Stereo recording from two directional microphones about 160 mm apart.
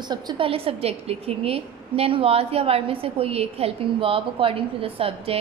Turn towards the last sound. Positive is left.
turn(degrees=-35)  # may be behind; listen again after turning